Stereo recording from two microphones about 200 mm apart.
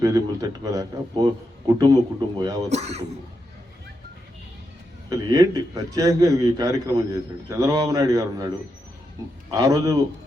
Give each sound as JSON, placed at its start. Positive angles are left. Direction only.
{"t": 0.0, "sound": "a man's voice", "side_deg": -15}
{"t": 2.6, "sound": "speech", "side_deg": -35}
{"t": 5.0, "sound": "a man's voice", "side_deg": -20}
{"t": 9.5, "sound": "a man's voice", "side_deg": -15}